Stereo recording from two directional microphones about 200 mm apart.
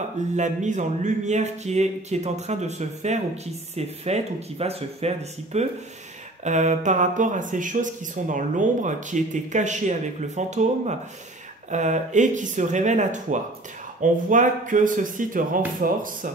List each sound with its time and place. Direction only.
0.3 s speech: 35° right (ahead or behind)